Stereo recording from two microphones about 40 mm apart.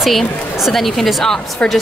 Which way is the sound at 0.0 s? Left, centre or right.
Centre.